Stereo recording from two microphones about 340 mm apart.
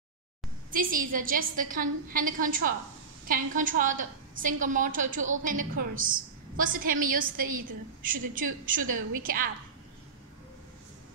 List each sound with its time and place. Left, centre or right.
0.7 s a woman's voice: right
8.8 s a woman's voice: right
9.2 s a woman's voice: right